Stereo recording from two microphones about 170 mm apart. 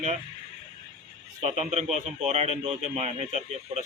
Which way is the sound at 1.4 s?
40° right (ahead or behind).